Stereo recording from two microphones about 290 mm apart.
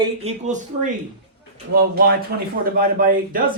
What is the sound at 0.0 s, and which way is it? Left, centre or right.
Speech, right.